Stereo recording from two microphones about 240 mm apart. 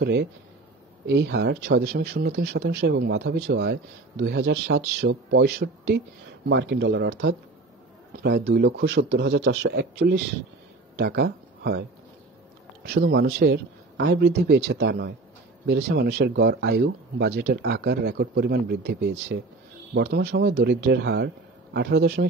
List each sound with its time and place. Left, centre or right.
0.0 s speech: right
12.8 s speech: right